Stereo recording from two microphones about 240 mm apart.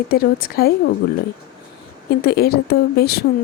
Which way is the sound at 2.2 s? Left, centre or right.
Left.